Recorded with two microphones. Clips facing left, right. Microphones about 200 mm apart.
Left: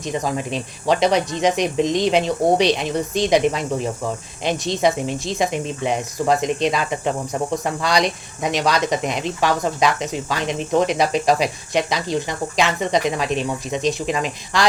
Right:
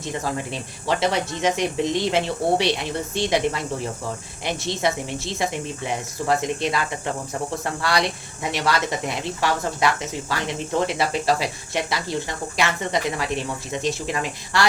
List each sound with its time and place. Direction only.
0.0 s speech: 15° left (ahead or behind)